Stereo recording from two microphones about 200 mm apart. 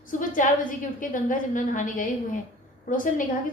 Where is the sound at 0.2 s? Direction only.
40° left (ahead or behind).